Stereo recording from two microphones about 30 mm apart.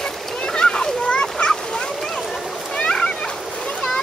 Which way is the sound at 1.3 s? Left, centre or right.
Left.